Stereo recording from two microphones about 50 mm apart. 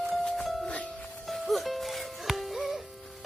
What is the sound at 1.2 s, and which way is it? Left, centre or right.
Music, centre.